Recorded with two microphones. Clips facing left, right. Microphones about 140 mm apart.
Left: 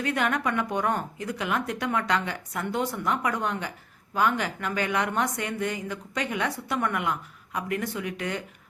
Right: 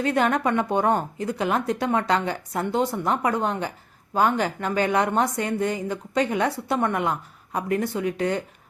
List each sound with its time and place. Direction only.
0.0 s a woman's voice: 30° right (ahead or behind)